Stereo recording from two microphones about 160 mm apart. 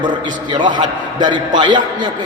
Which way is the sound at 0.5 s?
30° right (ahead or behind).